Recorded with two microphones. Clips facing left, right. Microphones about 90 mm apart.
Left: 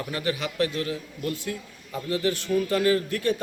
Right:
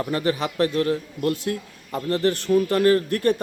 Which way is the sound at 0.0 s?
35° right (ahead or behind).